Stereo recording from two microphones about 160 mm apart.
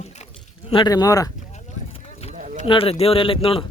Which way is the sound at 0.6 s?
30° left (ahead or behind).